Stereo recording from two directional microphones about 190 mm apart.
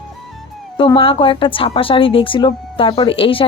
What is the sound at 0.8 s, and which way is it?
A woman's voice, 25° left (ahead or behind).